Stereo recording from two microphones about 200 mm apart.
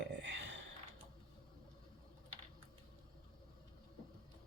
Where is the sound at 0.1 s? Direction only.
65° right (ahead or behind).